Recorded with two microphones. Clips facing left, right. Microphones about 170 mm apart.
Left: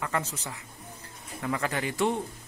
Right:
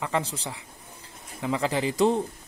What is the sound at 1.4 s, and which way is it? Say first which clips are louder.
Speech: right 4 dB; 20° right (ahead or behind).